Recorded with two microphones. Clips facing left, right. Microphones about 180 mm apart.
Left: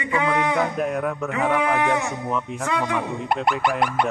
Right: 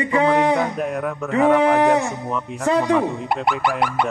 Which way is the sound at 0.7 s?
Centre (ahead or behind).